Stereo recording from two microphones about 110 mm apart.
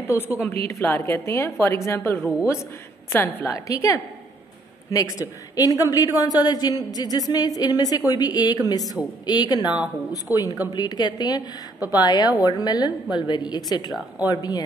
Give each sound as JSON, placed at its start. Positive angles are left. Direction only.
{"t": 0.4, "sound": "a woman's voice", "side_deg": 20}
{"t": 3.5, "sound": "a woman's voice", "side_deg": 30}